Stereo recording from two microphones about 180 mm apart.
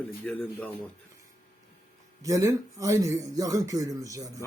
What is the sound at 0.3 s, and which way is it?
Speech, 10° left (ahead or behind).